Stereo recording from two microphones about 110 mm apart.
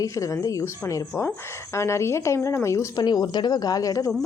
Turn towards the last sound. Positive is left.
turn(degrees=30)  # may be behind; listen again after turning